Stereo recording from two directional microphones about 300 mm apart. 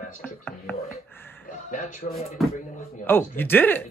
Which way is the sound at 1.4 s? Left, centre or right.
Left.